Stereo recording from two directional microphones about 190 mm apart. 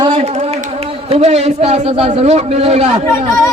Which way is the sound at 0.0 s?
30° right (ahead or behind).